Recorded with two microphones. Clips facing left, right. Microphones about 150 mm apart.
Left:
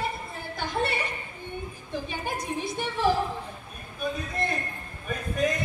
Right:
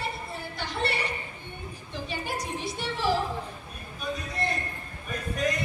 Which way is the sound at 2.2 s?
50° left (ahead or behind).